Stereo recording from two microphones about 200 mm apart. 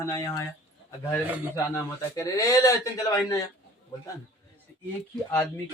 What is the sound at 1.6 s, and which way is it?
Speech, 15° left (ahead or behind).